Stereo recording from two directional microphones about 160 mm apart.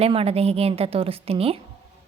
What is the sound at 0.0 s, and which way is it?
A woman's voice, 40° right (ahead or behind).